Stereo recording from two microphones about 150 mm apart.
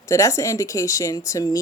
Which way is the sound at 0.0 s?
20° left (ahead or behind).